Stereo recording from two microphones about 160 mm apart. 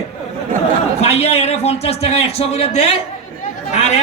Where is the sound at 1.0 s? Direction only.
40° left (ahead or behind).